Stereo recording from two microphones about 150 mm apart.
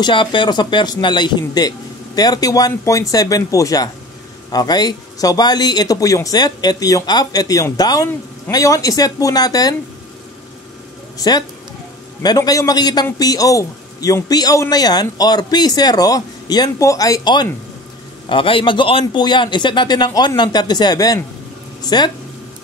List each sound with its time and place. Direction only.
0.0 s speech: 35° left (ahead or behind)
11.1 s speech: 25° left (ahead or behind)